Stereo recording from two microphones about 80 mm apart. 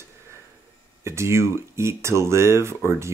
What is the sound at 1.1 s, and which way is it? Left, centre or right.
Speech, right.